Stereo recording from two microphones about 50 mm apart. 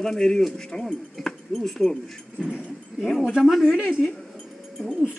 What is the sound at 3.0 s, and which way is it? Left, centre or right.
Speech, centre.